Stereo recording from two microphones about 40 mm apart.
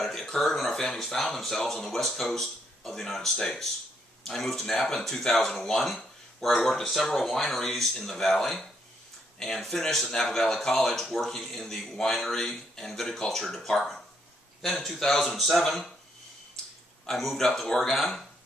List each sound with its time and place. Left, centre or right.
0.0 s speech: centre
17.0 s speech: centre